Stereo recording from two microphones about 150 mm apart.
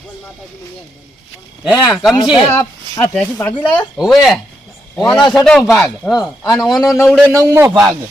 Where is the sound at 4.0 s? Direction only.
Centre (ahead or behind).